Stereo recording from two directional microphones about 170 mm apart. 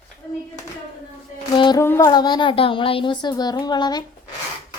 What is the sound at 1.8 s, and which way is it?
Speech, 15° left (ahead or behind).